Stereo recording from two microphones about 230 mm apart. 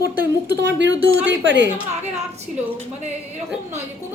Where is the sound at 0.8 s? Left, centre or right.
Right.